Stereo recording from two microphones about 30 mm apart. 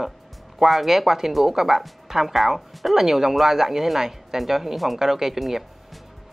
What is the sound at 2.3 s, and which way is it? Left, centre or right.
Speech, centre.